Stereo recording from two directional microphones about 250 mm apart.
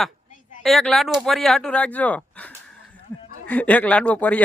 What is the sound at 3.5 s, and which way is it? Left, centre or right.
Speech, centre.